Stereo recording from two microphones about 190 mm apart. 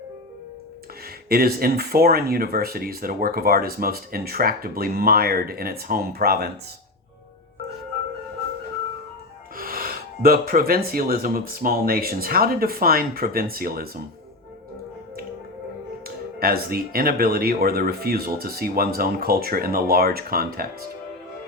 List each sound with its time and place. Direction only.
1.0 s speech: 55° right (ahead or behind)
9.6 s speech: 50° right (ahead or behind)
16.0 s speech: 50° right (ahead or behind)